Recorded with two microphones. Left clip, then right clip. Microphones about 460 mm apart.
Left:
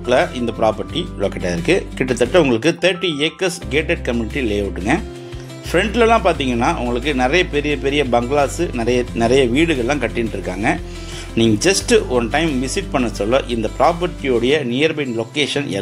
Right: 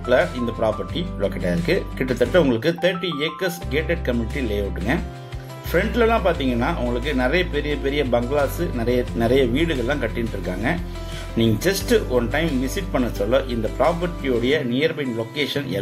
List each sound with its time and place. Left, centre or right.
0.1 s speech: right